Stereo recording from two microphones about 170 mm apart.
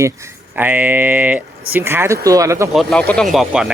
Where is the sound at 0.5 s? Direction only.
10° right (ahead or behind).